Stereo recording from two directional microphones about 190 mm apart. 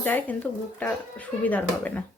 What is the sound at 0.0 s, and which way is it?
Dishes, 10° left (ahead or behind).